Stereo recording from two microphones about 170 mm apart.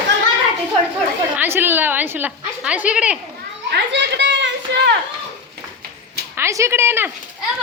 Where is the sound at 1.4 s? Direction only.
15° right (ahead or behind).